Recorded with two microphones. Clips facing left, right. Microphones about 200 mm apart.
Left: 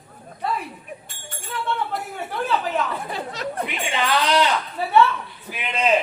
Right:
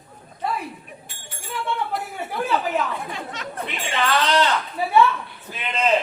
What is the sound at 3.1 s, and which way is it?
Chatter, 35° left (ahead or behind).